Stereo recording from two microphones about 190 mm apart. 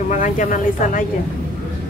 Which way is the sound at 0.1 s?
40° left (ahead or behind).